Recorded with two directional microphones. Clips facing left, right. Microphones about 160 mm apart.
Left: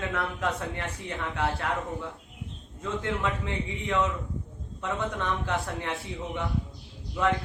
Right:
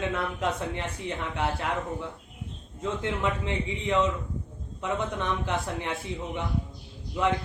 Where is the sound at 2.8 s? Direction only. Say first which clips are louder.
Right 1 dB; 20° right (ahead or behind).